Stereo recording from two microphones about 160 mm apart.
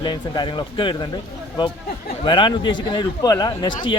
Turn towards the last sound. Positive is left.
turn(degrees=30)  # may be behind; listen again after turning